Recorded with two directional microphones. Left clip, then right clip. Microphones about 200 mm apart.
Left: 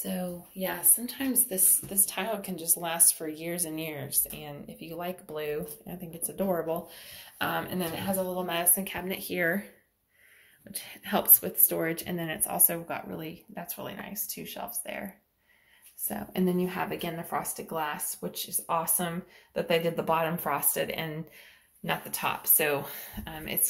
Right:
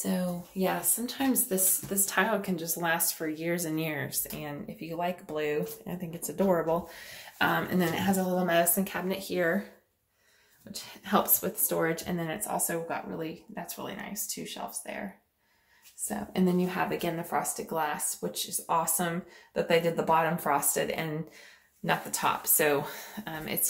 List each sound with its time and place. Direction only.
0.6 s a woman's voice: 25° right (ahead or behind)
9.1 s speech: centre (ahead or behind)
10.7 s speech: 5° right (ahead or behind)
16.1 s speech: centre (ahead or behind)